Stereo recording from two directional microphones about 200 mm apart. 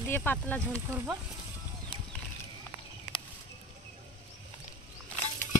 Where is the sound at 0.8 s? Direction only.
10° right (ahead or behind).